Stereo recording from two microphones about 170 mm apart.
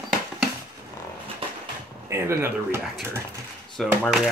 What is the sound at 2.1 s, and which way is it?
Speech, 15° right (ahead or behind).